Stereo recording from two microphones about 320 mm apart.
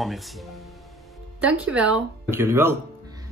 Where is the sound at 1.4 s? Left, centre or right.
Centre.